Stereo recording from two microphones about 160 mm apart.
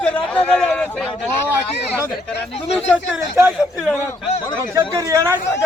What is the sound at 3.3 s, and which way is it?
Speech, 5° right (ahead or behind).